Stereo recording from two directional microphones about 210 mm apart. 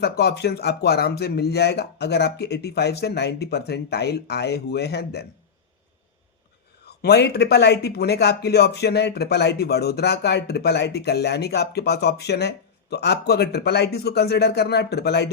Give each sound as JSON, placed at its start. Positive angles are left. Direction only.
{"t": 0.0, "sound": "speech", "side_deg": 50}
{"t": 6.8, "sound": "speech", "side_deg": 50}